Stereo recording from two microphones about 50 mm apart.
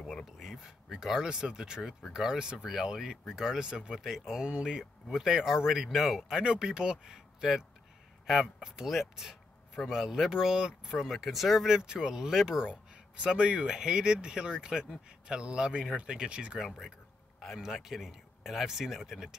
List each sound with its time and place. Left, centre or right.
0.0 s a sound: centre
0.4 s speech: centre
1.8 s speech: centre
2.1 s speech: centre
4.0 s speech: centre
4.4 s speech: right
5.1 s speech: centre
6.4 s speech: centre
16.5 s speech: centre